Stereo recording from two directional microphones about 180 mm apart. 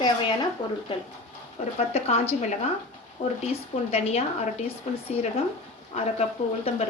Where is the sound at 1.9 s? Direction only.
35° left (ahead or behind).